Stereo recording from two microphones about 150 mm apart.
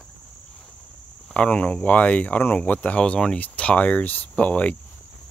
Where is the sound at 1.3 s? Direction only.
5° left (ahead or behind).